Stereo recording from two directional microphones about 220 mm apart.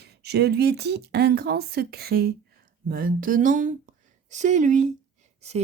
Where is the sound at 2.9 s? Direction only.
40° right (ahead or behind).